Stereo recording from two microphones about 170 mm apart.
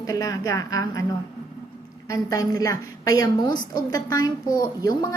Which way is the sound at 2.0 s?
20° left (ahead or behind).